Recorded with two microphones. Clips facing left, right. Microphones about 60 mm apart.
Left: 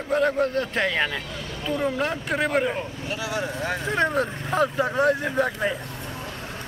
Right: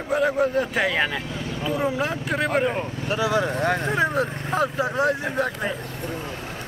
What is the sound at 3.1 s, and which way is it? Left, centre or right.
Speech, right.